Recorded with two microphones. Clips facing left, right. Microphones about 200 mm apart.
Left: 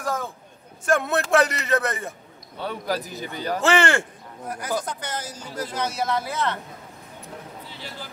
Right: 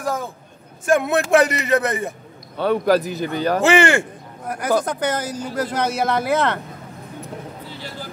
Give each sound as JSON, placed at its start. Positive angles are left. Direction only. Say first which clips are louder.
{"t": 0.0, "sound": "a sound", "louder": "right 3 dB", "side_deg": -5}
{"t": 0.8, "sound": "a man's voice", "louder": "right 4 dB", "side_deg": -10}
{"t": 2.5, "sound": "a man's voice", "louder": "right 11 dB", "side_deg": -75}
{"t": 3.6, "sound": "a man's voice", "louder": "right 4 dB", "side_deg": -15}
{"t": 4.5, "sound": "a man's voice", "louder": "right 8 dB", "side_deg": -70}